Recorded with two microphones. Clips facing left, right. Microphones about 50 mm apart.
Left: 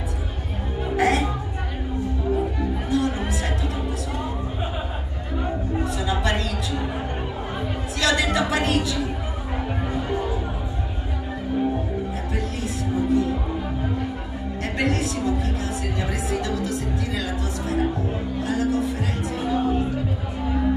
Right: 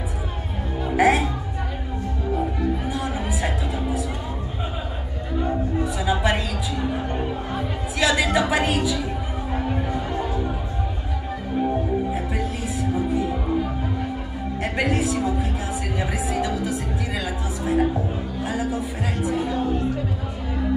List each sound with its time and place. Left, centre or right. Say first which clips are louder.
0.8 s music: right 3 dB; centre
2.9 s music: left 3 dB; centre
5.9 s a sound: right 3 dB; centre
8.0 s a sound: right 1 dB; centre
13.1 s music: left 2 dB; centre
14.6 s music: right 1 dB; centre